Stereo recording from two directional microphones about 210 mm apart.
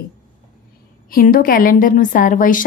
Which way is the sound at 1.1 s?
45° left (ahead or behind).